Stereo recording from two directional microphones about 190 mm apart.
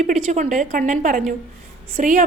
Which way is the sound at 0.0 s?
40° right (ahead or behind).